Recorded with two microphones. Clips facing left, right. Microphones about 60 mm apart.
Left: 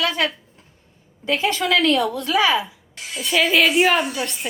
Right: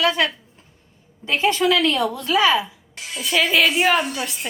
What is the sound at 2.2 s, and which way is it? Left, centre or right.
Speech, left.